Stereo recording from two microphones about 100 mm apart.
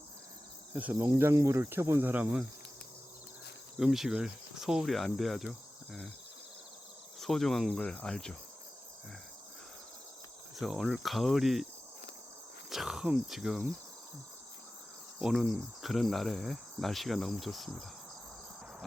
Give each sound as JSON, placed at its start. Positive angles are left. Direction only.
{"t": 0.7, "sound": "cricket", "side_deg": -15}
{"t": 3.8, "sound": "cricket", "side_deg": -5}
{"t": 7.2, "sound": "cricket", "side_deg": 0}
{"t": 10.6, "sound": "cricket", "side_deg": -5}
{"t": 12.7, "sound": "speech", "side_deg": -5}
{"t": 15.2, "sound": "cricket", "side_deg": 0}